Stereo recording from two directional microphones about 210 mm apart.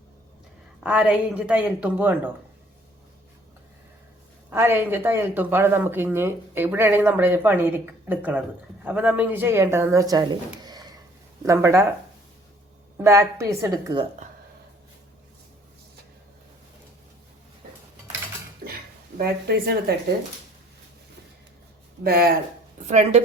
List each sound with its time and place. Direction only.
0.8 s speech: 5° right (ahead or behind)
4.4 s speech: 10° right (ahead or behind)
13.0 s speech: 15° right (ahead or behind)
19.1 s speech: 50° right (ahead or behind)
22.0 s speech: 45° right (ahead or behind)
22.9 s a woman's voice: 35° right (ahead or behind)